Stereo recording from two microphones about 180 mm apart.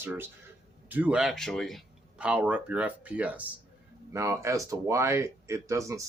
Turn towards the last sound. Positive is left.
turn(degrees=-15)  # may be behind; listen again after turning